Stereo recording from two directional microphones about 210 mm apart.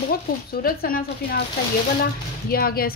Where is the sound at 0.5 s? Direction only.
45° left (ahead or behind).